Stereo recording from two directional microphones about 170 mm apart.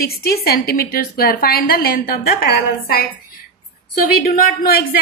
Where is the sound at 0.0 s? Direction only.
65° left (ahead or behind).